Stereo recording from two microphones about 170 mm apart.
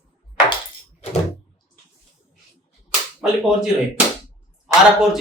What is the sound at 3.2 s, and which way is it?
A man's voice, 5° right (ahead or behind).